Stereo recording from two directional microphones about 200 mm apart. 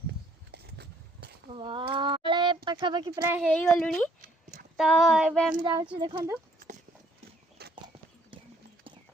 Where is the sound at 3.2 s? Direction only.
10° right (ahead or behind).